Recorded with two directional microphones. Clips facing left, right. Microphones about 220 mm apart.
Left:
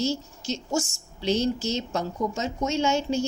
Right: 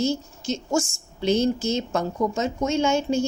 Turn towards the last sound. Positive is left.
turn(degrees=-50)  # may be behind; listen again after turning